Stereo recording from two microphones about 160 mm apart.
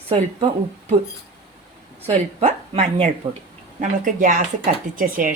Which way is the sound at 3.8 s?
55° right (ahead or behind).